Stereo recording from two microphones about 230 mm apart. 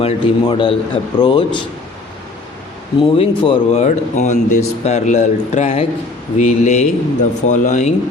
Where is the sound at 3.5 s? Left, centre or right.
Left.